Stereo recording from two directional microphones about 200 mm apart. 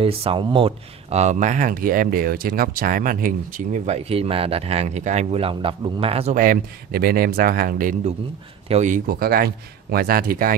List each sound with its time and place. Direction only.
0.0 s speech: 25° right (ahead or behind); by 10.5 s 45° right (ahead or behind)